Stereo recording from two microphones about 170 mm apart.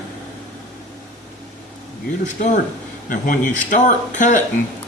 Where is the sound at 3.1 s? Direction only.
50° left (ahead or behind).